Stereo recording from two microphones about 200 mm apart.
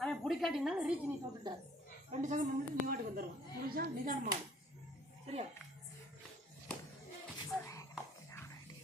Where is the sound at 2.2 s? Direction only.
40° right (ahead or behind).